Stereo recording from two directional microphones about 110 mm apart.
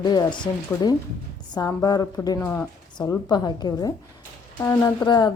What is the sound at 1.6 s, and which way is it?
A woman's voice, 35° left (ahead or behind).